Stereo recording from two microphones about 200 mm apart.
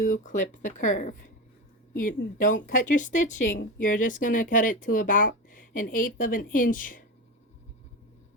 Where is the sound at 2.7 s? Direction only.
40° left (ahead or behind).